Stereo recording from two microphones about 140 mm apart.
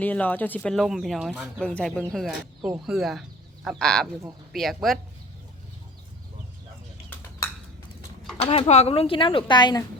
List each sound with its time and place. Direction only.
0.0 s speech: 10° left (ahead or behind)
8.4 s speech: 45° left (ahead or behind)